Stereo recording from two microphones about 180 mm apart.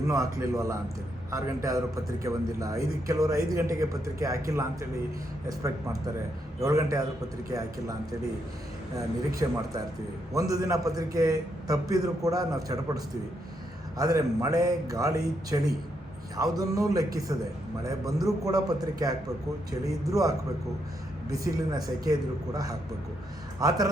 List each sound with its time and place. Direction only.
0.1 s a man's voice: 20° right (ahead or behind)
9.0 s a man's voice: 20° right (ahead or behind)